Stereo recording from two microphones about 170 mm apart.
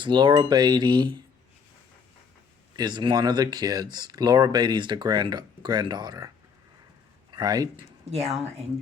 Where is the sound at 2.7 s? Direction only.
25° right (ahead or behind).